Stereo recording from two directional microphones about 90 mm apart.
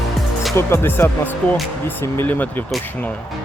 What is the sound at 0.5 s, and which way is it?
Speech, 25° left (ahead or behind).